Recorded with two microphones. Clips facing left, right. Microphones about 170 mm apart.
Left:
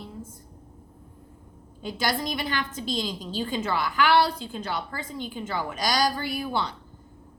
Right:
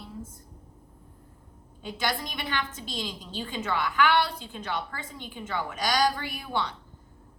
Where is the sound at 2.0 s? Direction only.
40° left (ahead or behind).